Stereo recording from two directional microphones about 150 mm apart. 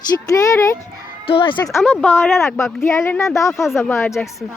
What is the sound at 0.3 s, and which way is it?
Speech, 20° left (ahead or behind).